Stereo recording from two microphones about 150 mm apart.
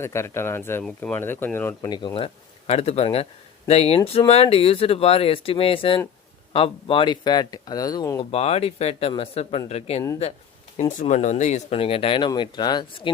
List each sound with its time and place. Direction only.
0.0 s speech: 20° left (ahead or behind)
0.9 s speech: 5° left (ahead or behind)
2.1 s speech: 40° left (ahead or behind); by 8.2 s 20° left (ahead or behind)
8.2 s speech: 45° left (ahead or behind)